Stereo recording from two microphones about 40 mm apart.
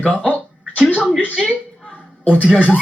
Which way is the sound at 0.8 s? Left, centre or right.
Left.